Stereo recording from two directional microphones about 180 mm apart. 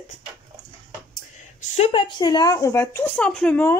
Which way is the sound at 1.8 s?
30° left (ahead or behind).